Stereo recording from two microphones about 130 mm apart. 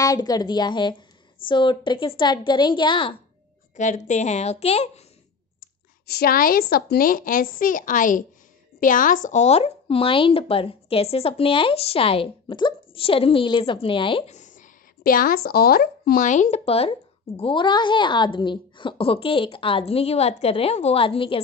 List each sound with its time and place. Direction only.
0.0 s a woman's voice: 30° left (ahead or behind)
3.7 s a woman's voice: 70° left (ahead or behind); by 5.0 s 55° left (ahead or behind)
7.0 s a woman's voice: 90° left; by 14.2 s 40° left (ahead or behind)
14.2 s a sound: 65° left (ahead or behind); by 15.3 s 90° left
16.2 s a woman's voice: 70° left (ahead or behind); by 16.9 s 50° left (ahead or behind)
17.4 s speech: 40° left (ahead or behind)